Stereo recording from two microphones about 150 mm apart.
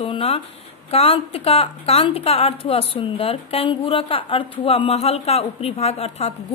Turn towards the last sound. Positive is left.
turn(degrees=45)  # may be behind; listen again after turning